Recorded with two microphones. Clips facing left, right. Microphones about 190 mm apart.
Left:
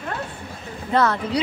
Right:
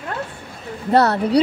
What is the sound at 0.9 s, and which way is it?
Speech, 35° right (ahead or behind).